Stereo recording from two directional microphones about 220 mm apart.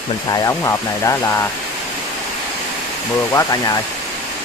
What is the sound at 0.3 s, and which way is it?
Speech, 15° left (ahead or behind).